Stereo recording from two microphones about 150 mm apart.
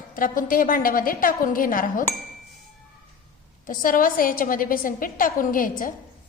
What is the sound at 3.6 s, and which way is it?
A woman's voice, 65° left (ahead or behind).